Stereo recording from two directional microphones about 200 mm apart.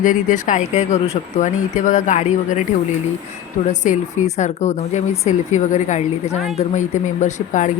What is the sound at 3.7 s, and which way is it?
Speech, 35° left (ahead or behind).